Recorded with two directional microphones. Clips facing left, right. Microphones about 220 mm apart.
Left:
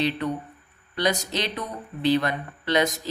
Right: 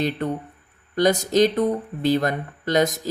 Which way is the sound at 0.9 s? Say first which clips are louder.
Right 8 dB; 45° right (ahead or behind).